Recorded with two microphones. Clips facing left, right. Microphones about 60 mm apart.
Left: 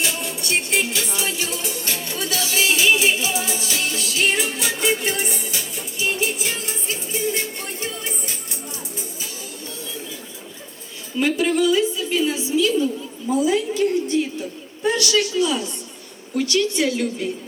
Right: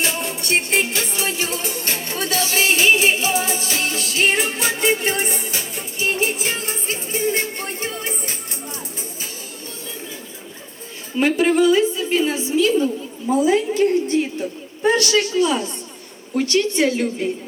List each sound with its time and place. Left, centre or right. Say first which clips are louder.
0.0 s music: right 2 dB; right
11.1 s a woman's voice: right 3 dB; right